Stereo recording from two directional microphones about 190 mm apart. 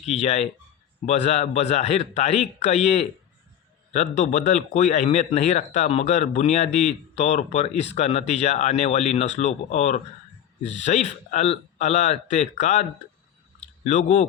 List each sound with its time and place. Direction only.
0.0 s speech: 35° left (ahead or behind)
13.8 s speech: 40° left (ahead or behind)